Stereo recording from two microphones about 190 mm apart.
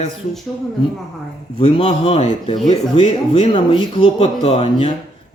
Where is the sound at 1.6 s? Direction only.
30° left (ahead or behind).